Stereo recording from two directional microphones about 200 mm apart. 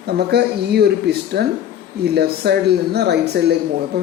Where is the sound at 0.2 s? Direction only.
55° right (ahead or behind).